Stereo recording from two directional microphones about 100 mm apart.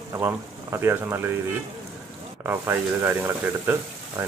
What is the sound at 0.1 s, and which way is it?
Speech, 20° right (ahead or behind).